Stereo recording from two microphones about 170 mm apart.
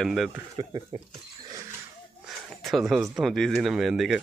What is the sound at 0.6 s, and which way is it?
Speech, 30° right (ahead or behind).